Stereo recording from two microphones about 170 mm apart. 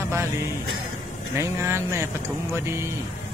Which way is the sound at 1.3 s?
15° right (ahead or behind).